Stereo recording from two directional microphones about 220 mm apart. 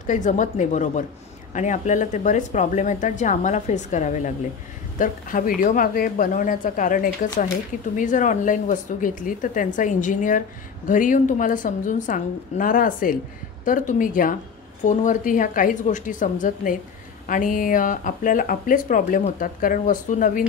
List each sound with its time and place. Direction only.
0.0 s speech: 35° left (ahead or behind)